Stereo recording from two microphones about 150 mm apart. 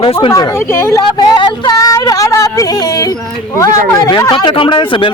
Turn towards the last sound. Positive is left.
turn(degrees=35)  # may be behind; listen again after turning